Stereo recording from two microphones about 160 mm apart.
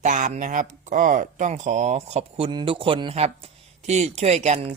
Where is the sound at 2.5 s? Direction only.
30° right (ahead or behind).